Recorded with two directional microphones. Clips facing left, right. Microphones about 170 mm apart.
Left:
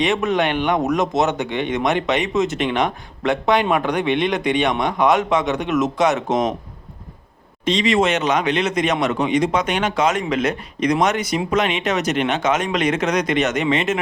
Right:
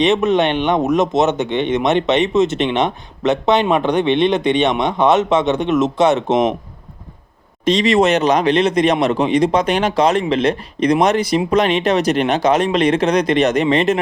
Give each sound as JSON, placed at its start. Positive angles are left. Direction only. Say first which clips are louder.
{"t": 0.0, "sound": "speech", "louder": "right 5 dB", "side_deg": -25}
{"t": 7.6, "sound": "speech", "louder": "right 4 dB", "side_deg": -40}